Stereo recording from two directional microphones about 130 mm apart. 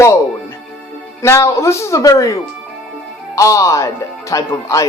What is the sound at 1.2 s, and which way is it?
Speech, 25° left (ahead or behind).